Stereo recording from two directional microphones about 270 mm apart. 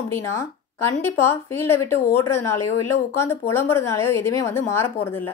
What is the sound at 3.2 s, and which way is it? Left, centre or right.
A woman's voice, centre.